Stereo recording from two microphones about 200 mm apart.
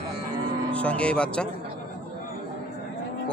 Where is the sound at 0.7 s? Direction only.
5° left (ahead or behind).